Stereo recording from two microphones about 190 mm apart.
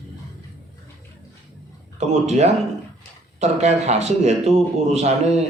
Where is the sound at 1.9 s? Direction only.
35° right (ahead or behind).